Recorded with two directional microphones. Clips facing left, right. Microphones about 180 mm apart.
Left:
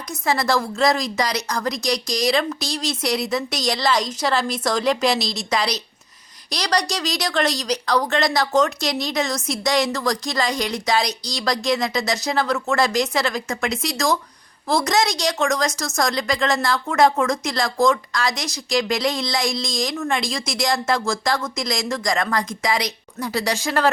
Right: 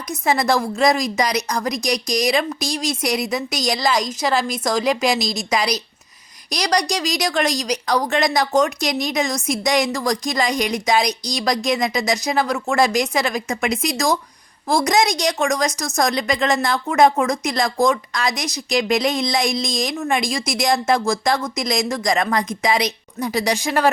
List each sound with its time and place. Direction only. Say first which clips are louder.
0.1 s a woman's voice: right 2 dB; 20° right (ahead or behind)